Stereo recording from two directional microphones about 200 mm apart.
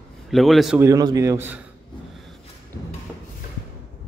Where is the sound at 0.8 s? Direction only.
20° right (ahead or behind).